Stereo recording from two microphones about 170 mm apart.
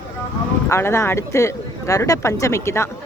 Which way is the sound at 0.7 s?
15° left (ahead or behind).